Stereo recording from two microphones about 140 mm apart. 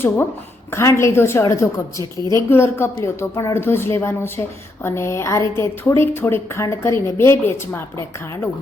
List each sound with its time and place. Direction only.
0.7 s a woman's voice: 20° left (ahead or behind)